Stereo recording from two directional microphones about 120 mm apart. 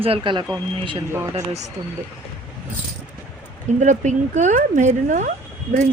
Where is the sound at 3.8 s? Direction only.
90° right.